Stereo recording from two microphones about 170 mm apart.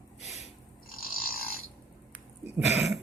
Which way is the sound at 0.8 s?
60° left (ahead or behind).